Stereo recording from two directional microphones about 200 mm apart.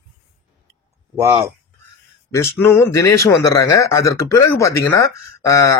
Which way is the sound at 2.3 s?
15° left (ahead or behind).